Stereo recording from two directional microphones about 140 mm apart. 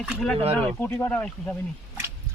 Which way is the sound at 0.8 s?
15° left (ahead or behind).